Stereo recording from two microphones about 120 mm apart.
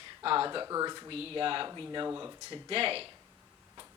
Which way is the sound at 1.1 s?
50° right (ahead or behind).